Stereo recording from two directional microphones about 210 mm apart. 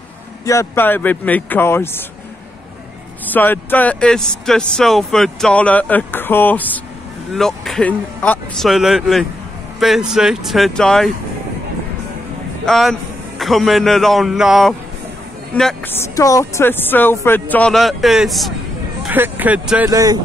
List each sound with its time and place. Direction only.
0.5 s speech: 10° left (ahead or behind)
3.3 s speech: 10° left (ahead or behind)
12.6 s a man's voice: centre (ahead or behind)
19.9 s speech: 15° right (ahead or behind)